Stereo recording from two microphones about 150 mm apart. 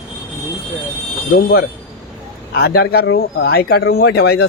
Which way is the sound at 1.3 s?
90° left.